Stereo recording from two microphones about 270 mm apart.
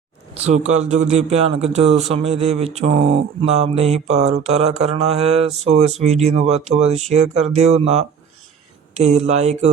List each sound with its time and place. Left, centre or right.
0.3 s speech: right